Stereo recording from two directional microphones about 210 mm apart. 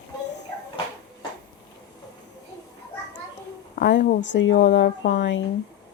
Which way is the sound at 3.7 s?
50° left (ahead or behind).